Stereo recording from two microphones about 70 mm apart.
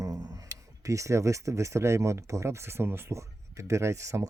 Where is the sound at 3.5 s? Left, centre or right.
Right.